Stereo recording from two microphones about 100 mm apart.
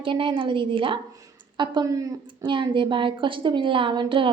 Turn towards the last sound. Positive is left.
turn(degrees=-55)  # may be behind; listen again after turning